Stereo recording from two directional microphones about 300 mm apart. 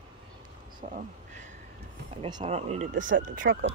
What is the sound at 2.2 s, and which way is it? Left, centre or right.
Speech, centre.